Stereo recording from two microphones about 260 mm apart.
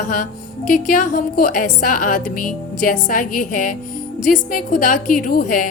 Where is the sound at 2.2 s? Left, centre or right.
Left.